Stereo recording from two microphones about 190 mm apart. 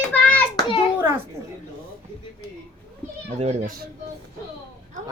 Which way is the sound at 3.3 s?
35° right (ahead or behind).